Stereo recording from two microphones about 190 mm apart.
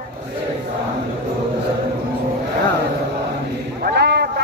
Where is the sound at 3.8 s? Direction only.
60° right (ahead or behind).